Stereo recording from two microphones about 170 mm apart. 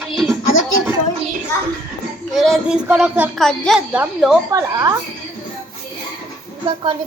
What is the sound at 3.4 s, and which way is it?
Speech, centre (ahead or behind).